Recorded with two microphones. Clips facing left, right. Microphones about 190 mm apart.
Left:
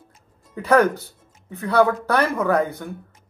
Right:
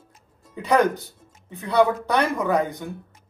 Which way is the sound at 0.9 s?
15° right (ahead or behind).